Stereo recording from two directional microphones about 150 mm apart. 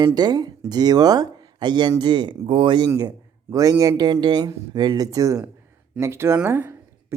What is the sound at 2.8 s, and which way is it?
Speech, 20° right (ahead or behind).